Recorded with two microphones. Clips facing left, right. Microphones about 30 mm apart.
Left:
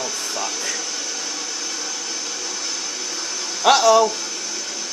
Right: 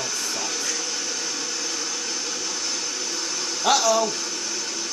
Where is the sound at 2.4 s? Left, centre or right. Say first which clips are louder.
Left 1 dB; centre.